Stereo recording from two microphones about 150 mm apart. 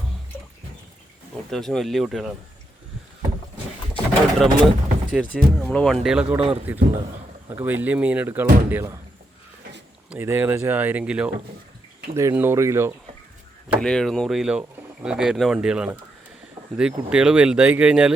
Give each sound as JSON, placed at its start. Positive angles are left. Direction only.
{"t": 1.5, "sound": "speech", "side_deg": 5}
{"t": 3.9, "sound": "pigeon", "side_deg": 5}
{"t": 5.1, "sound": "speech", "side_deg": 5}
{"t": 10.1, "sound": "speech", "side_deg": -15}
{"t": 13.7, "sound": "speech", "side_deg": 5}